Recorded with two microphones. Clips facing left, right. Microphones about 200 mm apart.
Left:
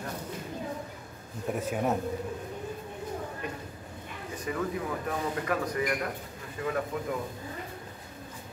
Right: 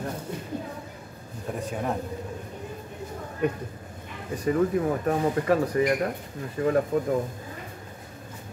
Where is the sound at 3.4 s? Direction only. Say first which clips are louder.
Right 11 dB; 60° right (ahead or behind).